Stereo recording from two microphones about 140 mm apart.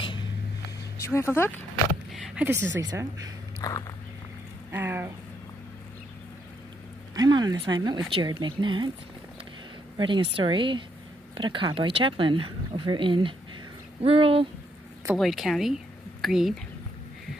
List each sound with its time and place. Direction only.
0.0 s a sound: 35° left (ahead or behind)
1.0 s speech: 20° left (ahead or behind)
2.2 s a woman's voice: 10° right (ahead or behind)
2.8 s speech: 25° right (ahead or behind)
3.6 s walk: 30° left (ahead or behind)
4.6 s speech: 15° right (ahead or behind)
7.2 s speech: 30° right (ahead or behind)
9.9 s speech: 35° right (ahead or behind)
15.1 s speech: centre (ahead or behind)